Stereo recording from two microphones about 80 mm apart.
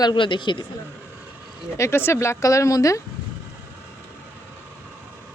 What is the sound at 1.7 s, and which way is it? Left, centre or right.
Speech, left.